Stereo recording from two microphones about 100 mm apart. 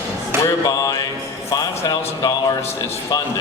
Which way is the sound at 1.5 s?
40° left (ahead or behind).